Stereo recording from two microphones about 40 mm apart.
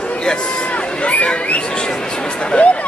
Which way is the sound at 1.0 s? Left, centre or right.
Left.